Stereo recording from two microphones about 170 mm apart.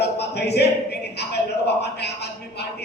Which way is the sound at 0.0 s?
75° left (ahead or behind).